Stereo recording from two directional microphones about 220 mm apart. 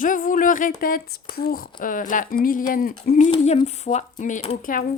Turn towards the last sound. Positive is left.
turn(degrees=40)  # may be behind; listen again after turning